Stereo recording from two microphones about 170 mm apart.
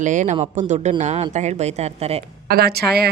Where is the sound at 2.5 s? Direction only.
65° right (ahead or behind).